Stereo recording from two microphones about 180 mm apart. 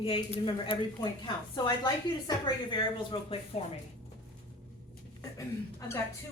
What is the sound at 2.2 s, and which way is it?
A woman's voice, 25° left (ahead or behind).